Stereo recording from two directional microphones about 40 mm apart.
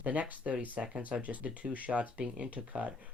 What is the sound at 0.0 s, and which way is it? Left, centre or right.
Speech, right.